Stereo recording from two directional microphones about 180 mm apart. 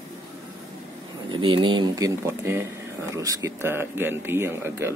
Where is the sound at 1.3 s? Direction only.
30° right (ahead or behind).